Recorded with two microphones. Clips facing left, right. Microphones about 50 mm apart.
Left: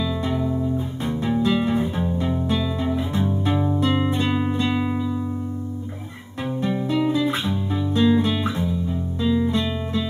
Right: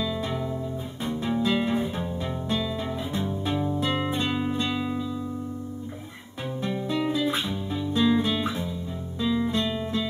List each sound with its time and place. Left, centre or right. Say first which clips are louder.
0.0 s music: left 5 dB; centre
3.5 s music: left 4 dB; left
3.8 s music: left 5 dB; centre
4.7 s music: left 5 dB; centre
6.6 s guitar: left 5 dB; centre
8.2 s music: left 4 dB; centre